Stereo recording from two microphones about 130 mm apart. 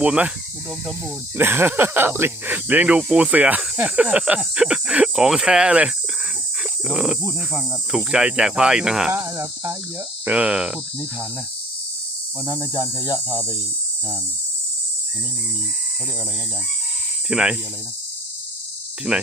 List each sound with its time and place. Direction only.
0.0 s speech: 10° right (ahead or behind)
1.4 s speech: 15° right (ahead or behind)
6.8 s cricket: 5° right (ahead or behind)
7.2 s speech: 20° left (ahead or behind)
7.9 s cricket: 5° right (ahead or behind)
9.1 s cricket: 20° right (ahead or behind)
10.2 s cricket: 10° right (ahead or behind)
12.5 s speech: 25° left (ahead or behind)
17.2 s speech: 5° right (ahead or behind)
19.1 s cricket: centre (ahead or behind)